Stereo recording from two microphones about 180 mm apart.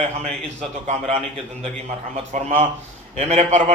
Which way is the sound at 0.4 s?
40° right (ahead or behind).